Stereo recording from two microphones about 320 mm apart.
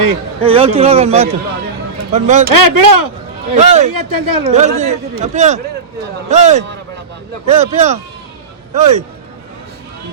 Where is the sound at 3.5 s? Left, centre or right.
Right.